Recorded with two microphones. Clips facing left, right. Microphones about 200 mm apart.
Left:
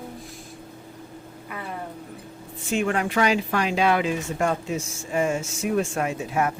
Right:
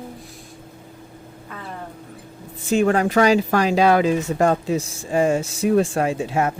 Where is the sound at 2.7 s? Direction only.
40° right (ahead or behind).